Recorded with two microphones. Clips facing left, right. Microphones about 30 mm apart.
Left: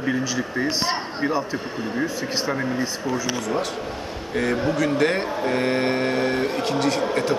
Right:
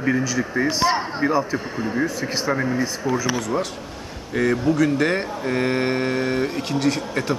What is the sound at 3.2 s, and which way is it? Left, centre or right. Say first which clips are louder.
A man's voice: right 1 dB; centre.